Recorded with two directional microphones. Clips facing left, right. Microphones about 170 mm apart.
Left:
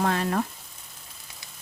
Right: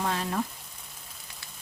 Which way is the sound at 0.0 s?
60° left (ahead or behind).